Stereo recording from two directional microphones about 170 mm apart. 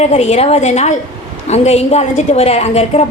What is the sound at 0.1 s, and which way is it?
A woman's voice, 40° left (ahead or behind).